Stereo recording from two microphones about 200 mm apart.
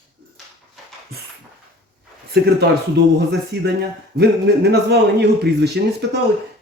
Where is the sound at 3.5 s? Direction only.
55° right (ahead or behind).